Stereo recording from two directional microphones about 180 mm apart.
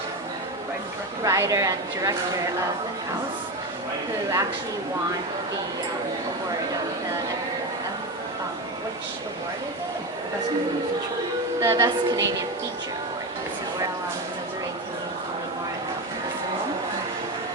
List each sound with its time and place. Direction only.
1.2 s a woman's voice: 20° right (ahead or behind)
11.6 s speech: 15° right (ahead or behind)